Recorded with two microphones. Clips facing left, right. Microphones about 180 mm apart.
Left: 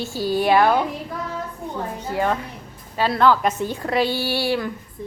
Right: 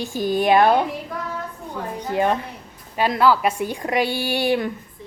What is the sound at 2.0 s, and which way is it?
A woman's voice, 20° right (ahead or behind).